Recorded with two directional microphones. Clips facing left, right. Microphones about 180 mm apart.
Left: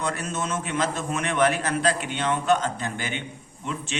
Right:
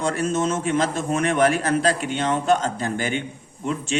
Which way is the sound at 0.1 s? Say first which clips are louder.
Right 7 dB; 45° right (ahead or behind).